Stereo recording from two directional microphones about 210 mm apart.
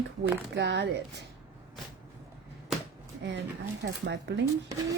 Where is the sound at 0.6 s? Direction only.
55° right (ahead or behind).